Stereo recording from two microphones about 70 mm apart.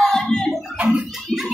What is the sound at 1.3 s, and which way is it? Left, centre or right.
Music, centre.